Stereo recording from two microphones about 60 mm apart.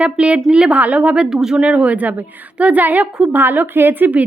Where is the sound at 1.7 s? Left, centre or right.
Right.